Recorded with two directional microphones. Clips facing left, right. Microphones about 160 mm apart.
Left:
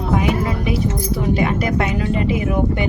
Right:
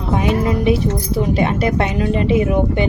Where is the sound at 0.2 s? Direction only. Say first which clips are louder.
Right 3 dB; 25° right (ahead or behind).